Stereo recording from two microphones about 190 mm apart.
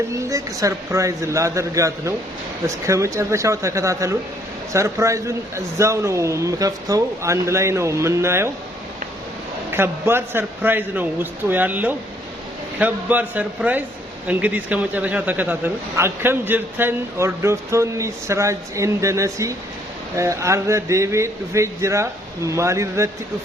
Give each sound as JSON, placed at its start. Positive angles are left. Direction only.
{"t": 0.1, "sound": "a man's voice", "side_deg": -15}
{"t": 9.7, "sound": "a man's voice", "side_deg": -10}